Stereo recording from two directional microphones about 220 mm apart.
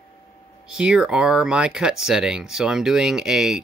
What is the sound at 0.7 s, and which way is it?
Speech, 5° right (ahead or behind).